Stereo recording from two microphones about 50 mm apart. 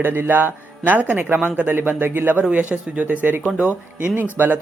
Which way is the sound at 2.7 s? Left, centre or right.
Right.